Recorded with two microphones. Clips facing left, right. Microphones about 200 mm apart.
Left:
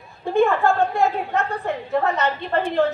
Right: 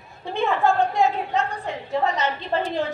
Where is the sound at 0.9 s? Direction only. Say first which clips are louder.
Left 1 dB; 15° right (ahead or behind).